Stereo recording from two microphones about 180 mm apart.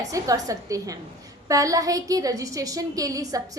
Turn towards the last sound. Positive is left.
turn(degrees=-20)  # may be behind; listen again after turning